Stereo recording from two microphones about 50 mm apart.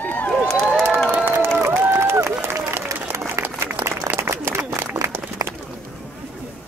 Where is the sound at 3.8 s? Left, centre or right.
Right.